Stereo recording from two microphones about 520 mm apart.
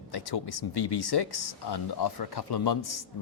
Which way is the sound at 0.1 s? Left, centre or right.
Left.